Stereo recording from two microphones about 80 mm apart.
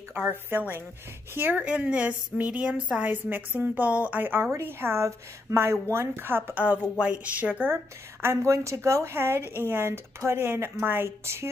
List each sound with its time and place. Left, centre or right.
0.3 s speech: right
1.6 s a woman's voice: centre
3.1 s a woman's voice: right